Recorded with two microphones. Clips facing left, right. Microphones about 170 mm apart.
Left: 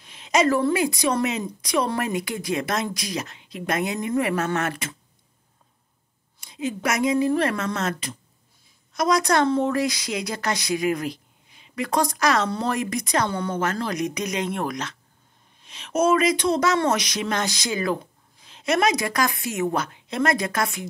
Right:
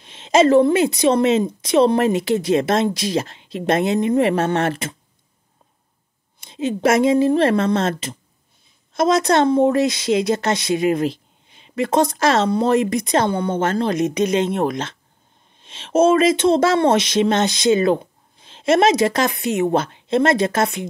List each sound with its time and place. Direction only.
0.0 s a woman's voice: 25° right (ahead or behind)
6.4 s a woman's voice: 25° right (ahead or behind)